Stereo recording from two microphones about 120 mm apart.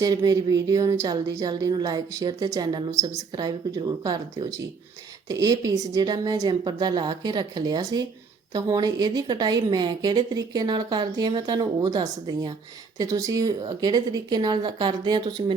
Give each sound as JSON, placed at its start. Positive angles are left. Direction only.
{"t": 0.0, "sound": "a woman's voice", "side_deg": -35}